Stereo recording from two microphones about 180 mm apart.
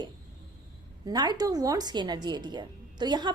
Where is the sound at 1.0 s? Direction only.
25° right (ahead or behind).